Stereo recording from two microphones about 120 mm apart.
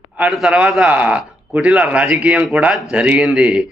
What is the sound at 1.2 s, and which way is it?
Speech, centre (ahead or behind).